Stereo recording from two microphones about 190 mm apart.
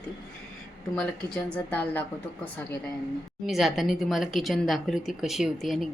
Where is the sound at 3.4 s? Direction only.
Centre (ahead or behind).